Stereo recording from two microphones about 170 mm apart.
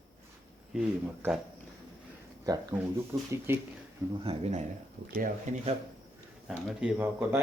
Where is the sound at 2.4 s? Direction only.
20° right (ahead or behind).